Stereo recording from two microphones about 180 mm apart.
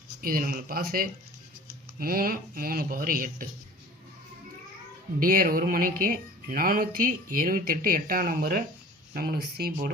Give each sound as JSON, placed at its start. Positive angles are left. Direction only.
{"t": 0.2, "sound": "speech", "side_deg": -55}
{"t": 5.2, "sound": "speech", "side_deg": -50}